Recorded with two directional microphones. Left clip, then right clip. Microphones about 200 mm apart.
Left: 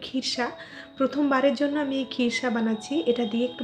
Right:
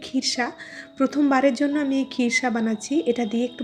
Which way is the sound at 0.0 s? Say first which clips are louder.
Right 3 dB; 30° right (ahead or behind).